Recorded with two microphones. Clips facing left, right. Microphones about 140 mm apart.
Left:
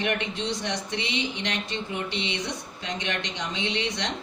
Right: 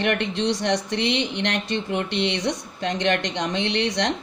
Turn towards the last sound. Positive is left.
turn(degrees=-70)  # may be behind; listen again after turning